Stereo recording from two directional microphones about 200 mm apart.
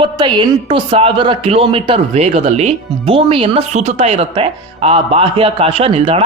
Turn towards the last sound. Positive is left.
turn(degrees=-30)  # may be behind; listen again after turning